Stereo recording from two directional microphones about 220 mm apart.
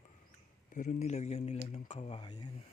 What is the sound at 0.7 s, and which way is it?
Speech, 35° left (ahead or behind).